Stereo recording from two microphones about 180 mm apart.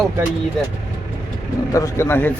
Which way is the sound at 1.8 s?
15° left (ahead or behind).